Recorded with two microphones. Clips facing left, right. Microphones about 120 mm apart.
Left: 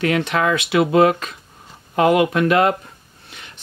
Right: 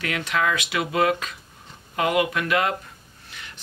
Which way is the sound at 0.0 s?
30° left (ahead or behind).